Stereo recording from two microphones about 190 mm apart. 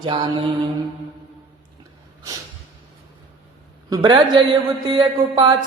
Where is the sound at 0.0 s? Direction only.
25° right (ahead or behind).